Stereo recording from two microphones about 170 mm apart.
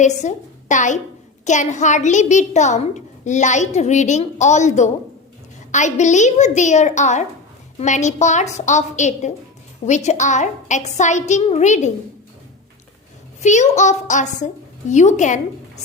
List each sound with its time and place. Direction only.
0.0 s a woman's voice: 45° left (ahead or behind)
13.4 s a woman's voice: 45° left (ahead or behind)